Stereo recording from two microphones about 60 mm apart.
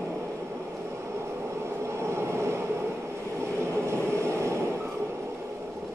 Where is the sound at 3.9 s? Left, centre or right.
Right.